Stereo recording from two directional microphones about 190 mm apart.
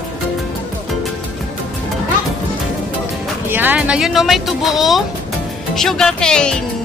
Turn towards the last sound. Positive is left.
turn(degrees=5)  # may be behind; listen again after turning